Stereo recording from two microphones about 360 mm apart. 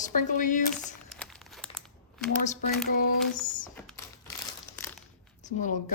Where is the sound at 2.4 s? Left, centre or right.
Left.